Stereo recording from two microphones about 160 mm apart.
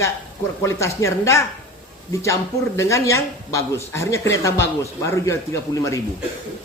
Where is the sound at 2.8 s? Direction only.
20° left (ahead or behind).